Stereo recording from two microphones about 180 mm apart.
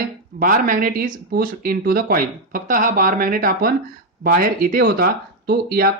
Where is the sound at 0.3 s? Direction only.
55° right (ahead or behind).